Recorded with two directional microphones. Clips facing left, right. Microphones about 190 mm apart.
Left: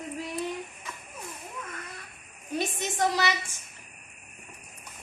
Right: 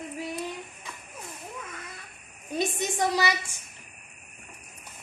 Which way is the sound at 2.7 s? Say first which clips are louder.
Left 1 dB; 15° right (ahead or behind).